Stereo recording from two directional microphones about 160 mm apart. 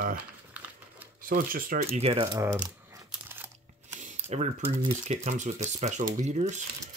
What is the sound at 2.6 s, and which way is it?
Crumpling, 10° right (ahead or behind).